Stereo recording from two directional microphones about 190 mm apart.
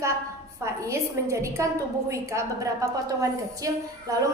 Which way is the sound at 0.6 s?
15° right (ahead or behind).